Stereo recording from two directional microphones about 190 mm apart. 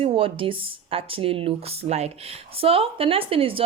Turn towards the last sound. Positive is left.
turn(degrees=-30)  # may be behind; listen again after turning